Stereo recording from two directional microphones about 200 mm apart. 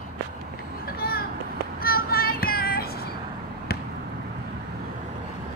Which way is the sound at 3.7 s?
50° left (ahead or behind).